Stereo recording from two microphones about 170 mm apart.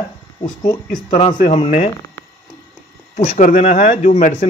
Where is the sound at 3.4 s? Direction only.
50° left (ahead or behind).